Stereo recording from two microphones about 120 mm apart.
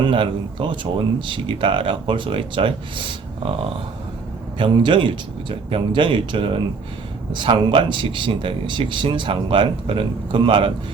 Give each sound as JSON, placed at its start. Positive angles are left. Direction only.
{"t": 0.0, "sound": "speech", "side_deg": -45}
{"t": 4.5, "sound": "speech", "side_deg": -45}